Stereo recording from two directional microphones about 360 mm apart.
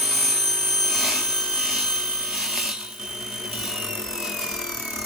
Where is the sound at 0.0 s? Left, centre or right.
Centre.